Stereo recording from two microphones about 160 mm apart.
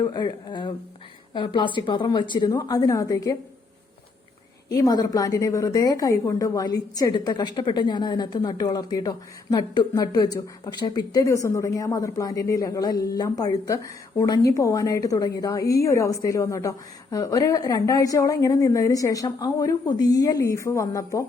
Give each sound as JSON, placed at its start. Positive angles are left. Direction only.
{"t": 0.0, "sound": "a woman's voice", "side_deg": 25}
{"t": 4.7, "sound": "a woman's voice", "side_deg": 25}